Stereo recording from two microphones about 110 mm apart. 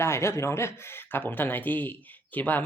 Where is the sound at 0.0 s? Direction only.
25° left (ahead or behind).